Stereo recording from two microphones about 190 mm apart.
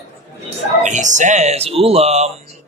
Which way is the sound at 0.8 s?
40° right (ahead or behind).